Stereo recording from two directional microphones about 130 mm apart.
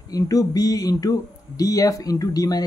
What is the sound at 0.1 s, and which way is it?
Speech, 30° left (ahead or behind).